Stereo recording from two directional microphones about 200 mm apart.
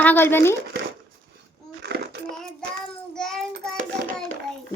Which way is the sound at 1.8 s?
55° right (ahead or behind).